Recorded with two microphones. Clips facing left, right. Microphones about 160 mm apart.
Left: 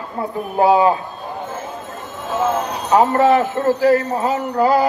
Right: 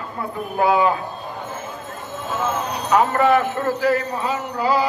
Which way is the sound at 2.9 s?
30° left (ahead or behind).